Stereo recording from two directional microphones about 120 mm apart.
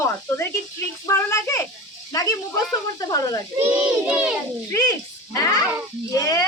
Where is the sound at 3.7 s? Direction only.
10° right (ahead or behind).